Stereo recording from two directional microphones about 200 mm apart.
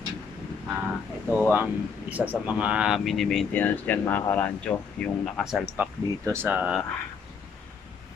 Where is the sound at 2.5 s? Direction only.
5° right (ahead or behind).